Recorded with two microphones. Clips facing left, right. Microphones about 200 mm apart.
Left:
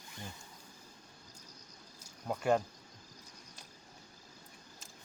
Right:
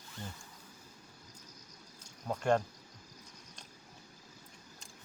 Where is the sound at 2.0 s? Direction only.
10° left (ahead or behind).